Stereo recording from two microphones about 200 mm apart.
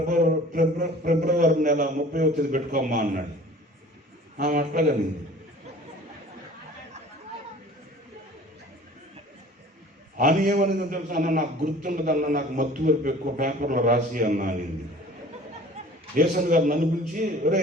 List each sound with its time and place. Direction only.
0.0 s a man's voice: 45° right (ahead or behind)
4.4 s a man's voice: 40° right (ahead or behind)
10.2 s a man's voice: 40° right (ahead or behind)
16.3 s a man's voice: 40° right (ahead or behind)